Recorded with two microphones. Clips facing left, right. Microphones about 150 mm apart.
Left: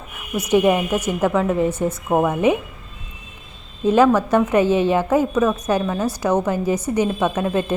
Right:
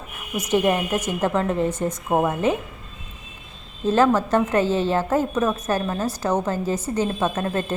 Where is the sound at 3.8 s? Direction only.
15° left (ahead or behind).